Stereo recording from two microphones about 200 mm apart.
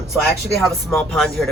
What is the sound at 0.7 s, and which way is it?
Speech, centre (ahead or behind).